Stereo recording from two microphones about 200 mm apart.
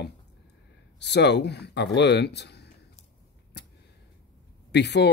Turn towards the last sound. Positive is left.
turn(degrees=60)  # may be behind; listen again after turning